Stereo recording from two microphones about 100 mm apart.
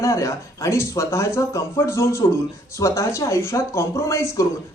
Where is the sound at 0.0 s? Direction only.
30° left (ahead or behind).